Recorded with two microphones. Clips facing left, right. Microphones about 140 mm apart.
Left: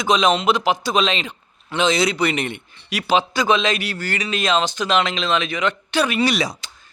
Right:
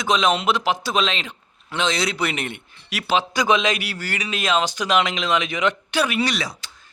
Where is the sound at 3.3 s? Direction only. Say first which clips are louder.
Left 1 dB; 15° right (ahead or behind).